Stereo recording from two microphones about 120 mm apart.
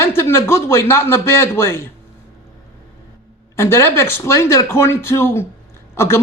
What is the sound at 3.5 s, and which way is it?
Speech, 20° left (ahead or behind).